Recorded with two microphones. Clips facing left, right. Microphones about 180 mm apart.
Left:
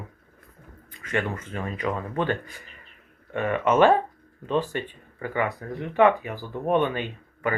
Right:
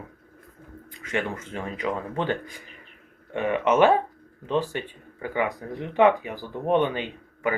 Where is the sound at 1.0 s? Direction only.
10° right (ahead or behind).